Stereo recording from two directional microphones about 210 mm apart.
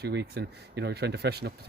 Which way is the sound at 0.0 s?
55° right (ahead or behind).